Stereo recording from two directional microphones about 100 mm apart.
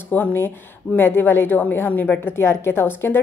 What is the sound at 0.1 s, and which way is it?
A woman's voice, 20° left (ahead or behind).